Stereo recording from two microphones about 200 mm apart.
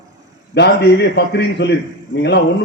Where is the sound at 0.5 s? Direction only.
60° left (ahead or behind).